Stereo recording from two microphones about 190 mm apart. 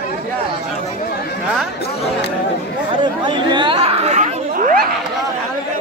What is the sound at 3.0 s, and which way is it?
Speech, 25° right (ahead or behind).